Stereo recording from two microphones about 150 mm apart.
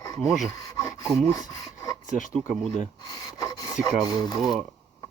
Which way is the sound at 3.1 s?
25° left (ahead or behind).